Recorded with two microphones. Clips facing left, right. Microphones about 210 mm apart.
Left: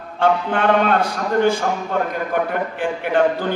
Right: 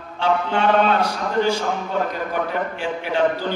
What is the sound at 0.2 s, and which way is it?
Speech, 55° left (ahead or behind).